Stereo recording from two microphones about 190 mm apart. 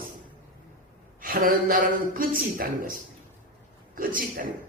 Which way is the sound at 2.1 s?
45° right (ahead or behind).